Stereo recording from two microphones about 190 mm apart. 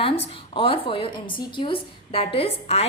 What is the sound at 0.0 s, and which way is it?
A woman's voice, 30° left (ahead or behind).